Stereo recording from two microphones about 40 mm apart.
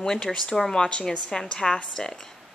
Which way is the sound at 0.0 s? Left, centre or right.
Centre.